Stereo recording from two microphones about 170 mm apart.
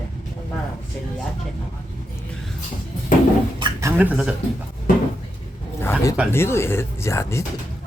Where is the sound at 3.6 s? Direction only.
25° right (ahead or behind).